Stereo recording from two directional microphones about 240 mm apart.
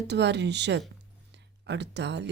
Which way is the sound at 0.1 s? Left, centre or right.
Right.